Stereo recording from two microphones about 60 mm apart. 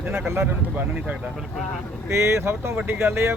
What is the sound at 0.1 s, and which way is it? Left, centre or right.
Speech, right.